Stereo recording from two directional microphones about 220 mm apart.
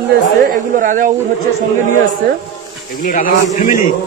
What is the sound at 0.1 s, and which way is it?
Speech, 40° right (ahead or behind).